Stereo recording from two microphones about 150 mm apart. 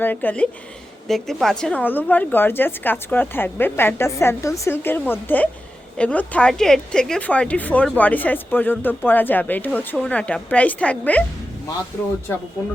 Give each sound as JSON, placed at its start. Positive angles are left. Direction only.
{"t": 0.0, "sound": "speech", "side_deg": 10}
{"t": 12.3, "sound": "speech", "side_deg": 20}